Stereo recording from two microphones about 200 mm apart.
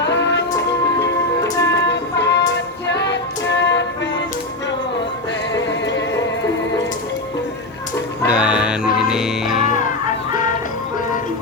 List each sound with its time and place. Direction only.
0.0 s music: 60° left (ahead or behind)
1.5 s music: 15° left (ahead or behind)
1.9 s music: 60° left (ahead or behind)
5.5 s music: 60° left (ahead or behind)
8.3 s music: 5° right (ahead or behind)